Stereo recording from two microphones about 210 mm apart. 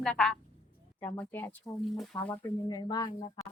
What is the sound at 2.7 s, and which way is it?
Speech, 20° left (ahead or behind).